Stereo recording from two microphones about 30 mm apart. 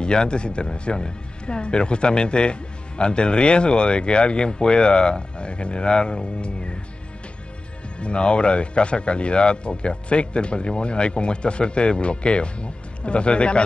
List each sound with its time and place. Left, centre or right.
0.0 s speech: left
8.0 s speech: left